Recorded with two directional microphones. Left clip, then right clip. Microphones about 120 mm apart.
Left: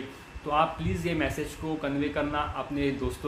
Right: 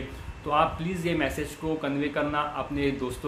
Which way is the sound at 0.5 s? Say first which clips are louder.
Right 2 dB; 10° right (ahead or behind).